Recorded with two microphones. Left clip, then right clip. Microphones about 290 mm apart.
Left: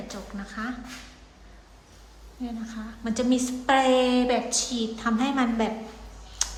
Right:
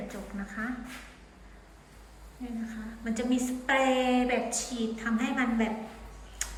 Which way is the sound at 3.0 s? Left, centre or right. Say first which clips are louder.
Left 5 dB; centre.